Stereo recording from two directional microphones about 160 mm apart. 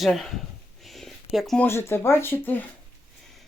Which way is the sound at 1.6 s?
15° left (ahead or behind).